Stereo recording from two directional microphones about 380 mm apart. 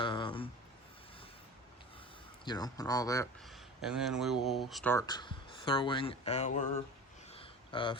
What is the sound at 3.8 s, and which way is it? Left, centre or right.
Speech, centre.